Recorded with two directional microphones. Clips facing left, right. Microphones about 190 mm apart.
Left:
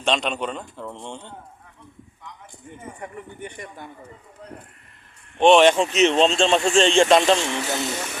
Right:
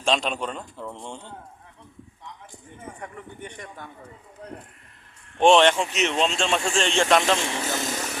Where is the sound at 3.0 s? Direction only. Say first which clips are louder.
Left 4 dB; 10° left (ahead or behind).